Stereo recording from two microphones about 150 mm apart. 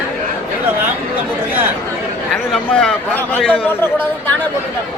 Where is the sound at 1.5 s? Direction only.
15° right (ahead or behind).